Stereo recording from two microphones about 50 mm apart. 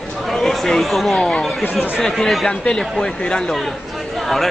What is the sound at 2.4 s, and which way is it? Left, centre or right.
Speech, centre.